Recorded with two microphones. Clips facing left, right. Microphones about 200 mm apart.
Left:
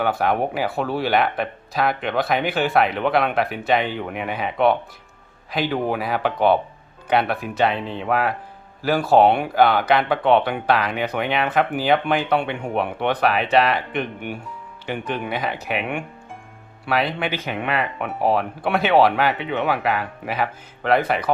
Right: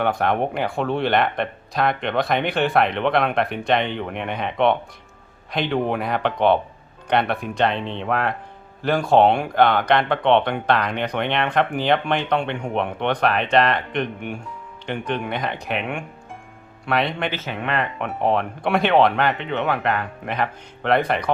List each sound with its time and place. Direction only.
0.0 s speech: 5° left (ahead or behind)